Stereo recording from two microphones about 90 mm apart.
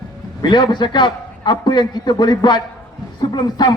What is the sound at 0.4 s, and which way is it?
A man's voice, 55° left (ahead or behind).